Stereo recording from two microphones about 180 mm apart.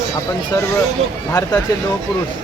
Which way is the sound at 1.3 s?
15° left (ahead or behind).